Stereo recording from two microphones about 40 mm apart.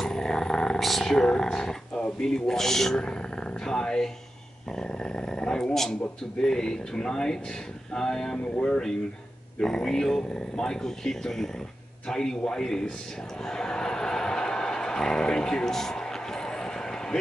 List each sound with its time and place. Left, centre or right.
0.0 s a sound: centre
0.7 s speech: centre
1.0 s speech: centre
3.0 s speech: centre
8.5 s speech: left
9.6 s speech: centre
13.4 s a sound: centre